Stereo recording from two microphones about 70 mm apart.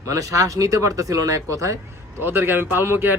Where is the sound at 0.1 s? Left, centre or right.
Right.